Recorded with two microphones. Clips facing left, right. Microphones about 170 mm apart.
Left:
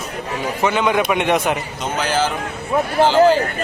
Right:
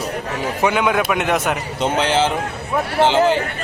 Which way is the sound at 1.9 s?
25° right (ahead or behind).